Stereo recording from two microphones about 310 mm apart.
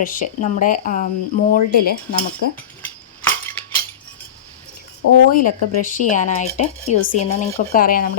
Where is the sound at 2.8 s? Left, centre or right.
Centre.